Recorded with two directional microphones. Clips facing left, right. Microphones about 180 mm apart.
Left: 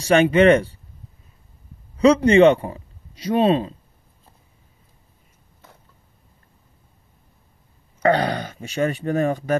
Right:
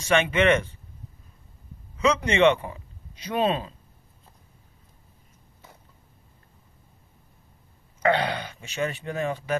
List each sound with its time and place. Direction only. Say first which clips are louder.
0.0 s speech: left 7 dB; 35° left (ahead or behind)
2.0 s speech: left 9 dB; 35° left (ahead or behind)
8.0 s speech: left 4 dB; 40° left (ahead or behind)